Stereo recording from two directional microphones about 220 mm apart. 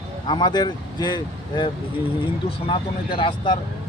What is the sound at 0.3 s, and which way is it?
A man's voice, 20° left (ahead or behind).